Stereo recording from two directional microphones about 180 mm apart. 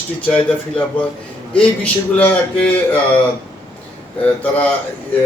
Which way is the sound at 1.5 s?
5° left (ahead or behind).